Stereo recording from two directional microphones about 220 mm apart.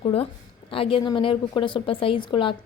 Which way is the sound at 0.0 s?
25° left (ahead or behind).